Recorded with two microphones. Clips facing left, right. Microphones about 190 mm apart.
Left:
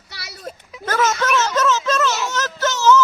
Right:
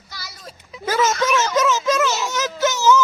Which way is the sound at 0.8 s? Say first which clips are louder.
Right 1 dB; 10° right (ahead or behind).